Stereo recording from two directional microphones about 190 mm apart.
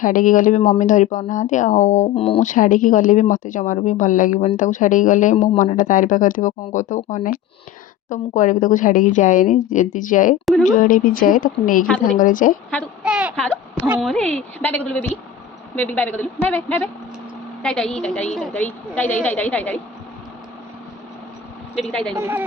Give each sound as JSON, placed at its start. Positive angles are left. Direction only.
{"t": 0.0, "sound": "speech", "side_deg": 45}
{"t": 13.0, "sound": "a woman's voice", "side_deg": -5}
{"t": 14.1, "sound": "a woman's voice", "side_deg": 5}
{"t": 21.8, "sound": "a woman's voice", "side_deg": 5}
{"t": 22.1, "sound": "speech", "side_deg": -10}